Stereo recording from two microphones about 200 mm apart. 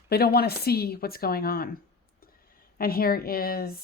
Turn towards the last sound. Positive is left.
turn(degrees=50)  # may be behind; listen again after turning